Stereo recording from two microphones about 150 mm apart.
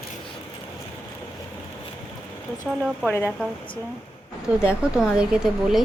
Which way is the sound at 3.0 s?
10° left (ahead or behind).